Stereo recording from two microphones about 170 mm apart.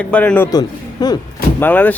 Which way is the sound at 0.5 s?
25° left (ahead or behind).